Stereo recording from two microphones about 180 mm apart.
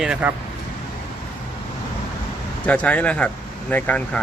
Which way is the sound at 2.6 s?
10° left (ahead or behind).